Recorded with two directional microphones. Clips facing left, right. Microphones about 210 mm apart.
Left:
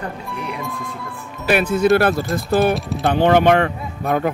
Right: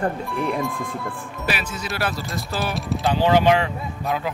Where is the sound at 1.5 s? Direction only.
55° left (ahead or behind).